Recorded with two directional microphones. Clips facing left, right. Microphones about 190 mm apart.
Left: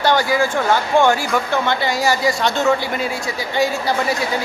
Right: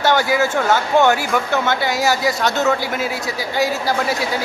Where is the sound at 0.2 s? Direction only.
5° right (ahead or behind).